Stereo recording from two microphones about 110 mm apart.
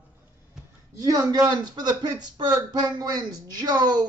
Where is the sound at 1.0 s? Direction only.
30° right (ahead or behind).